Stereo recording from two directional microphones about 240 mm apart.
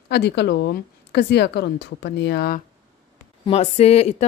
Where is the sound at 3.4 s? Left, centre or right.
Left.